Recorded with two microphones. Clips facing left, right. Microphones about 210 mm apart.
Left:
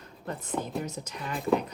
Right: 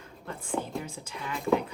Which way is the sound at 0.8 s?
40° left (ahead or behind).